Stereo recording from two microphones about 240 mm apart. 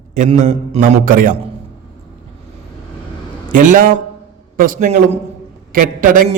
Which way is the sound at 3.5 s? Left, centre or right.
Right.